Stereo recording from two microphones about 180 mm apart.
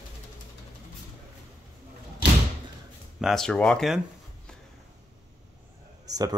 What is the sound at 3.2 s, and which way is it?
Speech, centre (ahead or behind).